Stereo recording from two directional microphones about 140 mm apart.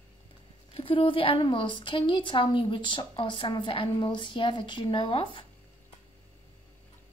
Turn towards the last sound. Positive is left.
turn(degrees=35)  # may be behind; listen again after turning